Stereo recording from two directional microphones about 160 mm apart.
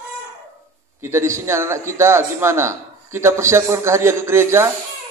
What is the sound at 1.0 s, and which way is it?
A man's voice, 15° right (ahead or behind).